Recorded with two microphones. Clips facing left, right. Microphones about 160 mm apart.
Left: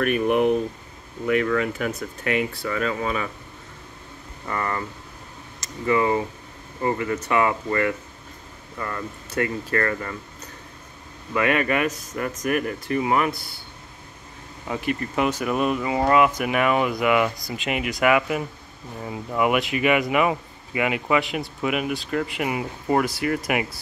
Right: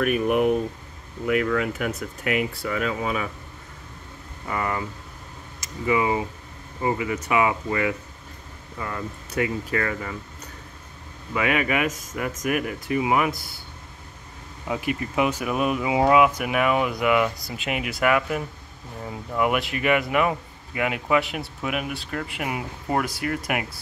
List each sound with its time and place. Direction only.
0.0 s speech: 5° right (ahead or behind)
4.5 s speech: 10° right (ahead or behind)
11.3 s speech: 5° right (ahead or behind)
14.7 s speech: 5° right (ahead or behind)